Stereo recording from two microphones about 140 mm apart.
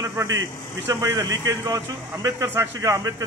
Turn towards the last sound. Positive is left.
turn(degrees=-25)  # may be behind; listen again after turning